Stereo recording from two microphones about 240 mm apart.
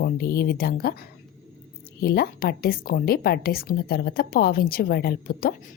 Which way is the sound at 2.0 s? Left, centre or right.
Left.